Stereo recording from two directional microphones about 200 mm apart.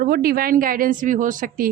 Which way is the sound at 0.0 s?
50° right (ahead or behind).